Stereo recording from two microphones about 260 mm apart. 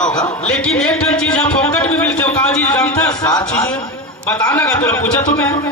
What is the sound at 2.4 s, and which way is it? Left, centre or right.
A man's voice, centre.